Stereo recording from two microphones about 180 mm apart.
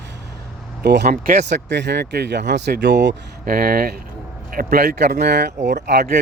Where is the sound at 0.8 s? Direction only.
60° right (ahead or behind).